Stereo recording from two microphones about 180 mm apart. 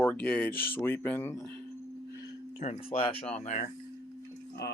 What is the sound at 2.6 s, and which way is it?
Speech, 35° left (ahead or behind).